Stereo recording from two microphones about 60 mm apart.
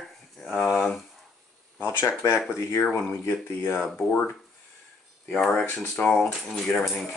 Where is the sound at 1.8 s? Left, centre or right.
Left.